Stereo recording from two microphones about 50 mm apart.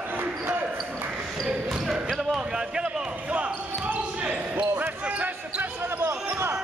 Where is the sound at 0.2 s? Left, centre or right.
Right.